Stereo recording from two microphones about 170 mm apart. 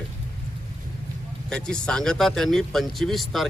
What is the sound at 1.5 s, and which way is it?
Speech, 5° left (ahead or behind).